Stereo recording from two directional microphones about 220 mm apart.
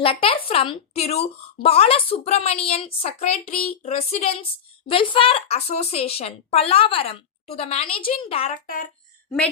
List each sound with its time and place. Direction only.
0.0 s speech: 25° left (ahead or behind)
8.6 s speech: 40° left (ahead or behind)